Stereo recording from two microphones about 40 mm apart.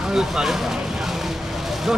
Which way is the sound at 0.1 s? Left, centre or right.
Centre.